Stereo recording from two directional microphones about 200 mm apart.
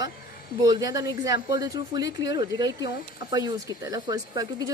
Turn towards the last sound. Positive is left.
turn(degrees=-20)  # may be behind; listen again after turning